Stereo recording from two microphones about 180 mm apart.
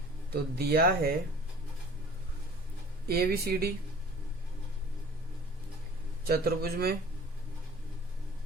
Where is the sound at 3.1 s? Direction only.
60° right (ahead or behind).